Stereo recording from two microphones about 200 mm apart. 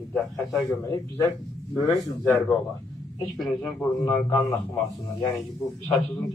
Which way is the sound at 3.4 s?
5° left (ahead or behind).